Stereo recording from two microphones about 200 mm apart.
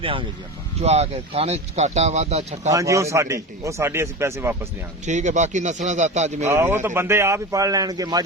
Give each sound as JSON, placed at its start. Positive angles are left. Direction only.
{"t": 0.0, "sound": "speech", "side_deg": -25}
{"t": 2.6, "sound": "a man's voice", "side_deg": -15}
{"t": 5.0, "sound": "speech", "side_deg": -35}
{"t": 6.5, "sound": "a man's voice", "side_deg": -10}